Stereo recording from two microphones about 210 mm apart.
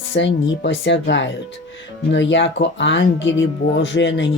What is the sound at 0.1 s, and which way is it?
Speech, 60° left (ahead or behind).